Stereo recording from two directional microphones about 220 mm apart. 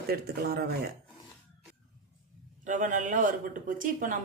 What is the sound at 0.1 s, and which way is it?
Speech, 45° right (ahead or behind).